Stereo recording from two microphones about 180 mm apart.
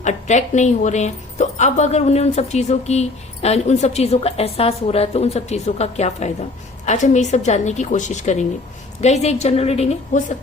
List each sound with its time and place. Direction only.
0.0 s speech: 40° left (ahead or behind)